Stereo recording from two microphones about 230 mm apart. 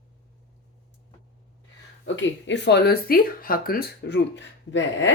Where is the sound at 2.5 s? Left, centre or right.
Left.